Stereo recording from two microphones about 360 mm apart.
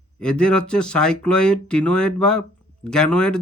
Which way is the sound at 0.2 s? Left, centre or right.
Centre.